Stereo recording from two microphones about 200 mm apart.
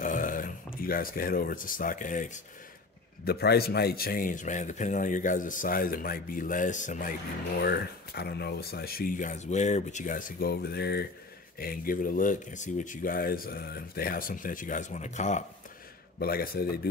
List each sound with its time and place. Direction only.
0.0 s a sound: 40° left (ahead or behind)
0.7 s speech: 45° left (ahead or behind)
3.3 s speech: 50° left (ahead or behind)
7.6 s speech: 50° left (ahead or behind); by 15.4 s 35° left (ahead or behind)
16.2 s speech: 50° left (ahead or behind)